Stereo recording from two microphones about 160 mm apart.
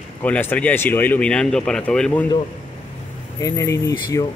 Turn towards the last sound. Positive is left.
turn(degrees=20)  # may be behind; listen again after turning